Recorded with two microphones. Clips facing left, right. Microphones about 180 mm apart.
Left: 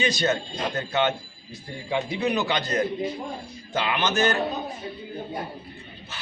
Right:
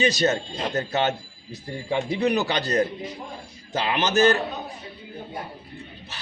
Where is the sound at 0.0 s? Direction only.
40° right (ahead or behind).